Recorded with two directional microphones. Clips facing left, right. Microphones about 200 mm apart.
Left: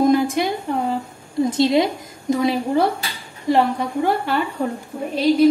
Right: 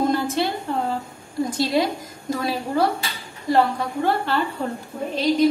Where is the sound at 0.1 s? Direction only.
15° left (ahead or behind).